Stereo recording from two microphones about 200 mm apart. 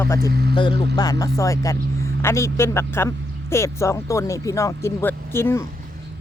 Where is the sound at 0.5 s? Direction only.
25° left (ahead or behind).